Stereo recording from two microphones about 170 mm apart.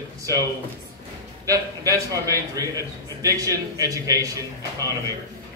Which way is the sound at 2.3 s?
20° right (ahead or behind).